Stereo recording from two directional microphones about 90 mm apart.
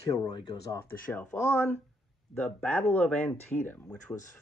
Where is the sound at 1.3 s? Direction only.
30° left (ahead or behind).